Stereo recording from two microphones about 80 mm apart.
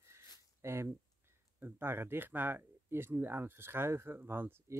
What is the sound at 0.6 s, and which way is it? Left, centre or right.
Speech, right.